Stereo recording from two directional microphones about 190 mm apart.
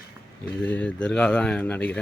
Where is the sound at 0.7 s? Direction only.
5° left (ahead or behind).